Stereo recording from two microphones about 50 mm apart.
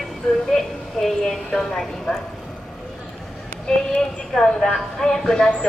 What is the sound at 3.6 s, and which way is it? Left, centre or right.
Speech, left.